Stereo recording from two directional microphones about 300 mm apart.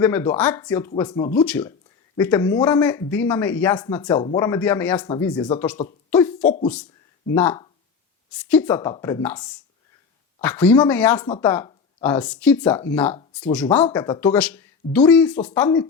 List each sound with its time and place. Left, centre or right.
0.0 s speech: centre
6.4 s speech: left
7.3 s speech: centre
13.8 s speech: centre